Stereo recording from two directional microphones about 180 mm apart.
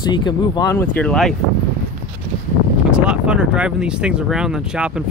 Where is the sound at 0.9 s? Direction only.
5° left (ahead or behind).